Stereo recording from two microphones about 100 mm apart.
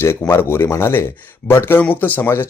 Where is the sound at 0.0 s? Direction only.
25° left (ahead or behind).